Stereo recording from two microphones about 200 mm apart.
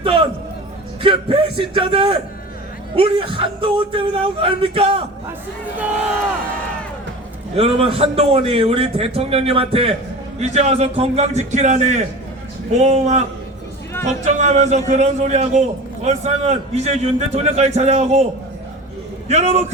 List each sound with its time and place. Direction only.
0.0 s music: 25° right (ahead or behind)
1.0 s a man's voice: 25° right (ahead or behind)
7.5 s a man's voice: 30° right (ahead or behind)
14.3 s a man's voice: 35° right (ahead or behind)
19.3 s a man's voice: 35° right (ahead or behind)